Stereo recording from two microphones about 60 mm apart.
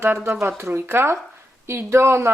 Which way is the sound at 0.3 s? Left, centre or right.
Right.